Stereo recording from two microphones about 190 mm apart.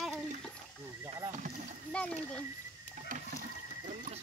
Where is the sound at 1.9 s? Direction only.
5° left (ahead or behind).